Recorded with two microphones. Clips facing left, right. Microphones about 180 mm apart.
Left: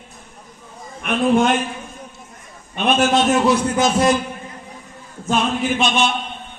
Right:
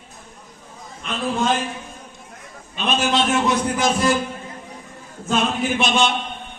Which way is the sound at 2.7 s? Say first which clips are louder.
Left 4 dB; 60° left (ahead or behind).